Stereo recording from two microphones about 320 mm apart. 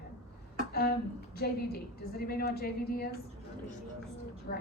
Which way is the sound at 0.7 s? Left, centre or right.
Left.